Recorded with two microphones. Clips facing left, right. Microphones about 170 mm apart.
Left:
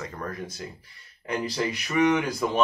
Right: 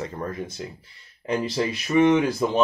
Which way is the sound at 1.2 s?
25° right (ahead or behind).